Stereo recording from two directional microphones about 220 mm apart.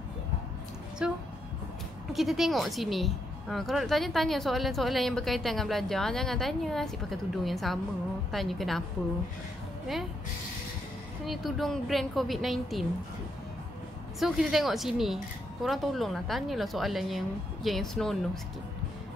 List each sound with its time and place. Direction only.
1.0 s speech: 5° right (ahead or behind)
11.2 s speech: centre (ahead or behind)
14.2 s speech: centre (ahead or behind)